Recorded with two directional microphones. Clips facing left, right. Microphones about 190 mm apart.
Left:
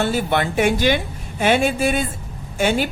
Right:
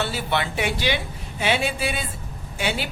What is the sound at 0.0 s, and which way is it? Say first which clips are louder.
A woman's voice: left 6 dB; 50° left (ahead or behind).